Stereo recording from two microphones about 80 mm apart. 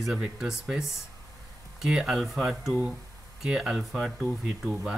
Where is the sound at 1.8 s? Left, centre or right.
Centre.